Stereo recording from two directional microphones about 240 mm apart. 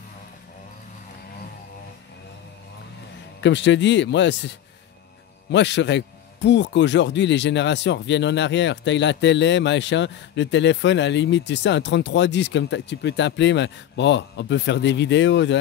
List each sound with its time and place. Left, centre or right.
3.3 s a man's voice: left